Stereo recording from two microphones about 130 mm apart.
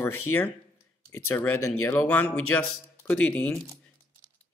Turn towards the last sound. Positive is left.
turn(degrees=5)  # may be behind; listen again after turning